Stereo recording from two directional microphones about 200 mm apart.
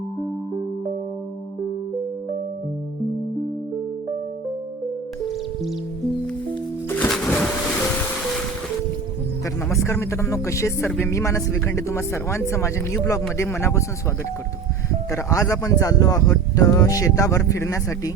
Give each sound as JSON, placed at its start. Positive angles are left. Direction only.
{"t": 6.5, "sound": "music", "side_deg": 5}
{"t": 9.6, "sound": "speech", "side_deg": 15}
{"t": 15.1, "sound": "speech", "side_deg": 15}